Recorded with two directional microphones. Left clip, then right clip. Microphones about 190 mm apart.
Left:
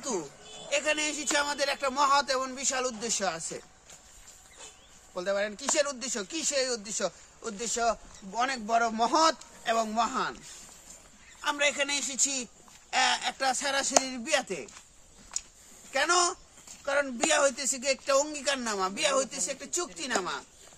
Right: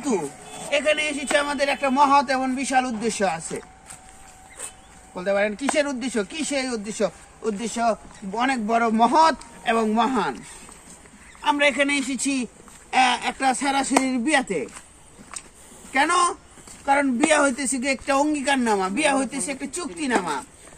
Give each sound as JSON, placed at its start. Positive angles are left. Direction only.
{"t": 0.7, "sound": "speech", "side_deg": 20}
{"t": 5.1, "sound": "speech", "side_deg": 25}
{"t": 11.4, "sound": "speech", "side_deg": 25}
{"t": 15.9, "sound": "speech", "side_deg": 30}